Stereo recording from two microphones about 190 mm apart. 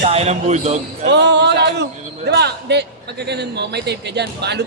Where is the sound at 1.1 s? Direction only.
65° right (ahead or behind).